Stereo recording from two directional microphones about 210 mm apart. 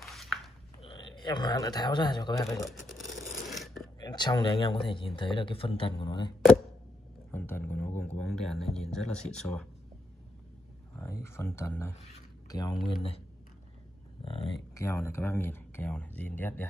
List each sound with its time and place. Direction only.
0.0 s biting: centre (ahead or behind)
0.8 s speech: 20° left (ahead or behind)
3.4 s a sound: centre (ahead or behind)
4.0 s speech: 20° left (ahead or behind)
7.2 s speech: 10° left (ahead or behind)
11.0 s speech: 15° left (ahead or behind)
14.2 s speech: 20° left (ahead or behind)